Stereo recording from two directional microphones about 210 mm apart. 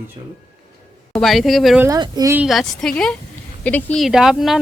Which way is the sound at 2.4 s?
Centre (ahead or behind).